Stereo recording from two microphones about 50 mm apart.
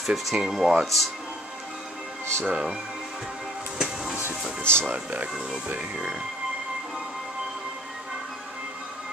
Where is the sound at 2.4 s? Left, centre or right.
Centre.